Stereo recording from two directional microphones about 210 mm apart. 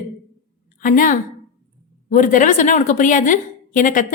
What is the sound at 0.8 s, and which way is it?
A woman's voice, 40° left (ahead or behind).